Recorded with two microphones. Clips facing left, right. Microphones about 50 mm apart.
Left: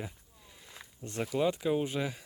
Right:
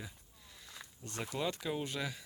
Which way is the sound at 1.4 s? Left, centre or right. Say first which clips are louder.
Left 8 dB; centre.